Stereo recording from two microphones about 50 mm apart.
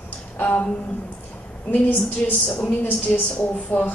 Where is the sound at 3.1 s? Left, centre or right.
Centre.